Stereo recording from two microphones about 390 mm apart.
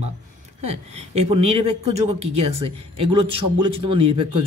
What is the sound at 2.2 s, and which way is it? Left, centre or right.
Speech, right.